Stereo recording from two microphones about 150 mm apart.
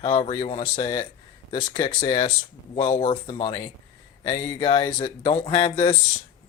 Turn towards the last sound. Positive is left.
turn(degrees=30)  # may be behind; listen again after turning